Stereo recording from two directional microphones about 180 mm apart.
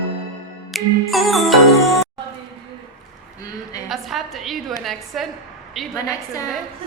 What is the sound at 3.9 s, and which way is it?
A woman's voice, centre (ahead or behind).